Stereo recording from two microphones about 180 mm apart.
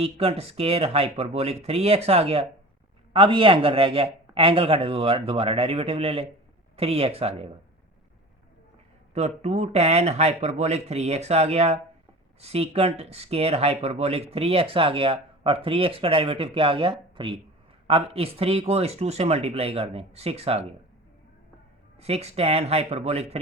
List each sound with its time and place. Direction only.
0.0 s speech: 35° right (ahead or behind)
9.1 s speech: 40° right (ahead or behind)
21.9 s speech: 35° right (ahead or behind)